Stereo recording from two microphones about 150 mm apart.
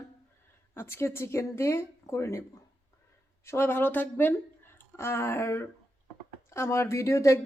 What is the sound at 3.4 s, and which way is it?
A woman's voice, 15° left (ahead or behind).